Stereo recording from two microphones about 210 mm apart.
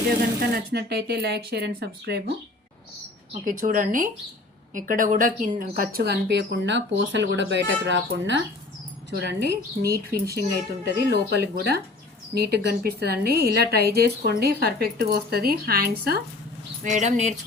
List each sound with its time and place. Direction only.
0.5 s a woman's voice: 50° right (ahead or behind)
3.4 s a woman's voice: 40° right (ahead or behind)
16.8 s a woman's voice: 35° right (ahead or behind)